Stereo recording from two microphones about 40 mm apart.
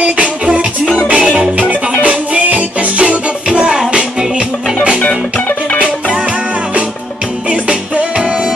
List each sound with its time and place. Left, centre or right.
0.0 s music: right
3.4 s music: right
7.4 s music: right